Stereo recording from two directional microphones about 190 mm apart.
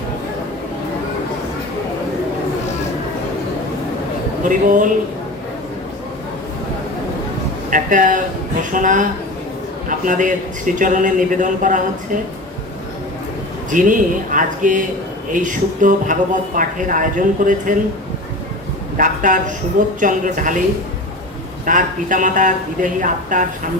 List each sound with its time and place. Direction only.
4.4 s a woman's voice: 45° right (ahead or behind)
7.7 s a woman's voice: 45° right (ahead or behind)
13.7 s a woman's voice: 45° right (ahead or behind)
18.9 s a woman's voice: 45° right (ahead or behind)
21.7 s a woman's voice: 45° right (ahead or behind)